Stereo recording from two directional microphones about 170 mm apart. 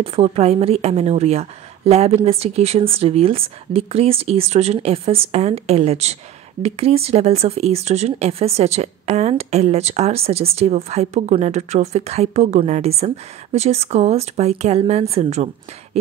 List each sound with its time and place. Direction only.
0.0 s speech: 35° right (ahead or behind)